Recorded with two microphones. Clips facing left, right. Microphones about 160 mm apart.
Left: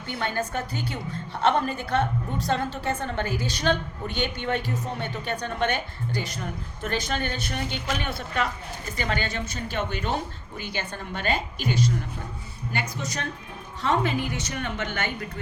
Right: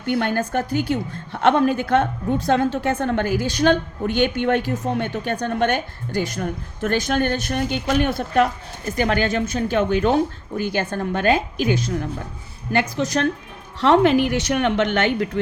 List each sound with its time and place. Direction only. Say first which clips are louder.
0.0 s a woman's voice: right 8 dB; 70° right (ahead or behind)
3.0 s speech: right 8 dB; 70° right (ahead or behind)
5.1 s a woman's voice: right 7 dB; 50° right (ahead or behind)
6.1 s a woman's voice: right 9 dB; 45° right (ahead or behind)
7.5 s a woman's voice: right 9 dB; 50° right (ahead or behind)
12.7 s a woman's voice: right 11 dB; 90° right